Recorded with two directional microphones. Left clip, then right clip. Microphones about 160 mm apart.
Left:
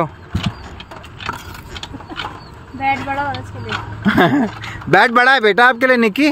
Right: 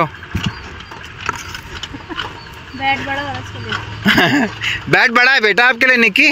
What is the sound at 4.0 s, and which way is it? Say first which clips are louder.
A man's voice: right 2 dB; 20° left (ahead or behind).